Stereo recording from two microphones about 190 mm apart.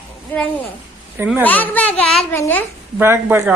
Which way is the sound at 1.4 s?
10° left (ahead or behind).